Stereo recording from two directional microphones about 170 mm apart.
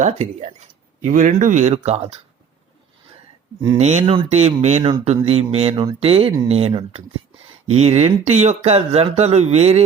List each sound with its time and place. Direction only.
0.0 s speech: 40° right (ahead or behind)
3.8 s speech: 40° right (ahead or behind)